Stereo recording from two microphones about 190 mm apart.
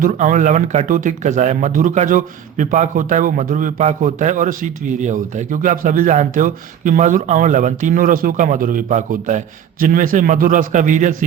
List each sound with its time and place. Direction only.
0.0 s speech: 45° right (ahead or behind)